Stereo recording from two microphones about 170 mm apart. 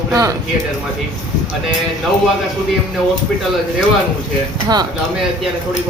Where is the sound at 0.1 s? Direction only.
20° right (ahead or behind).